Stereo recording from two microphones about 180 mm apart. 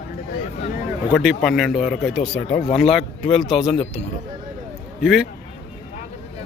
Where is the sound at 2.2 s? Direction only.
35° left (ahead or behind).